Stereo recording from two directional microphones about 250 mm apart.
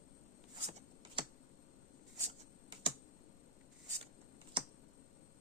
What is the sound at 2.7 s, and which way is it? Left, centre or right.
Computer keyboard, right.